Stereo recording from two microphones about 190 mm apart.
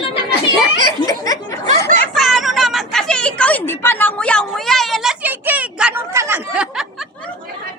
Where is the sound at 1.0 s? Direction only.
20° left (ahead or behind).